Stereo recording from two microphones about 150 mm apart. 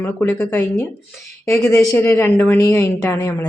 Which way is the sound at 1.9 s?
15° left (ahead or behind).